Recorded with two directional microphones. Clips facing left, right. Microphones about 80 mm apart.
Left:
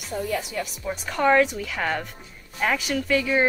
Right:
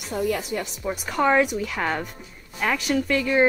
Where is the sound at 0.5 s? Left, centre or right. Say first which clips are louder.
Right 2 dB; right.